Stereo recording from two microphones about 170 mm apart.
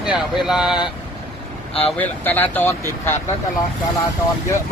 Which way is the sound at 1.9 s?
10° left (ahead or behind).